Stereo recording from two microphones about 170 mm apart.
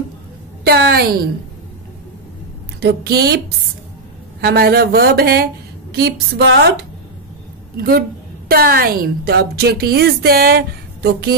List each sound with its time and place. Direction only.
0.7 s a woman's voice: 65° right (ahead or behind)
2.8 s a woman's voice: 75° right (ahead or behind)
4.4 s a woman's voice: 65° right (ahead or behind); by 6.9 s 90° right
7.7 s a woman's voice: 65° right (ahead or behind)